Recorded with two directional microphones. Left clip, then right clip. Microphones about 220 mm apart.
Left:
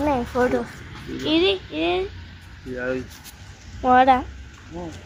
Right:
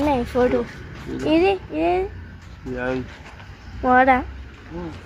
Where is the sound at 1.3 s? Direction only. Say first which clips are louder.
Right 2 dB; 25° right (ahead or behind).